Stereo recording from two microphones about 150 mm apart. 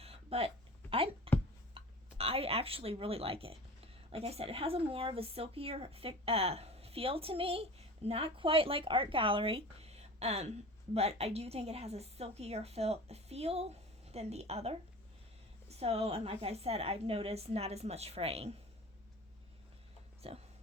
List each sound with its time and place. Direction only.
0.0 s a sound: 40° right (ahead or behind)
4.1 s a woman's voice: 40° right (ahead or behind)
20.2 s speech: 40° right (ahead or behind)